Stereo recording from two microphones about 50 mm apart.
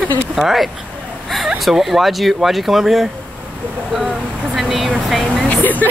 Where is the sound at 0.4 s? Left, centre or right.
Centre.